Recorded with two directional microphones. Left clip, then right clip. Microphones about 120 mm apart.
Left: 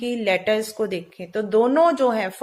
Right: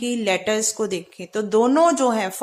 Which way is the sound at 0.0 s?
35° right (ahead or behind).